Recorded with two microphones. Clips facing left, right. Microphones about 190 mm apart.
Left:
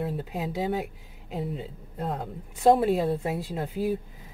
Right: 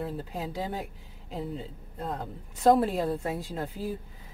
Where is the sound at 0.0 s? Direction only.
10° left (ahead or behind).